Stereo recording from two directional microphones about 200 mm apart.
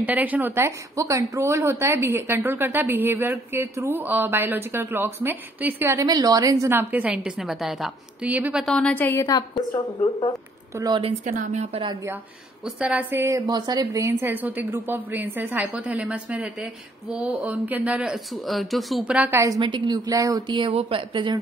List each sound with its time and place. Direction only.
0.0 s a woman's voice: 10° right (ahead or behind)
8.6 s a woman's voice: 5° left (ahead or behind)
10.8 s a woman's voice: 25° right (ahead or behind)
12.6 s a woman's voice: 5° right (ahead or behind); by 21.4 s 25° right (ahead or behind)